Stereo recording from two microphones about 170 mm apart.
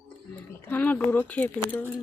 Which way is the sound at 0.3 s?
10° left (ahead or behind).